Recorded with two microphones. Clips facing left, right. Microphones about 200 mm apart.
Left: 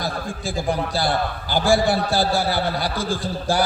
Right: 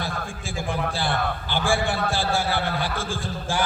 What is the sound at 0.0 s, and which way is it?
A man's voice, 40° left (ahead or behind).